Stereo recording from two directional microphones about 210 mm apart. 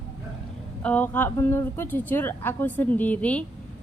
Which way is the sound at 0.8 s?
5° left (ahead or behind).